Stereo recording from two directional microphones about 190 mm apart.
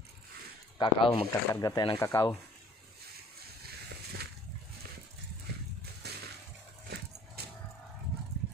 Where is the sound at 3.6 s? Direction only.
55° right (ahead or behind).